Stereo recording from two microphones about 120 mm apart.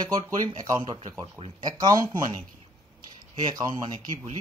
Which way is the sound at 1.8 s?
30° right (ahead or behind).